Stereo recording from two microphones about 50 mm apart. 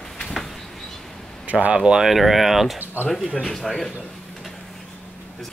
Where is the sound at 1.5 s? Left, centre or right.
Right.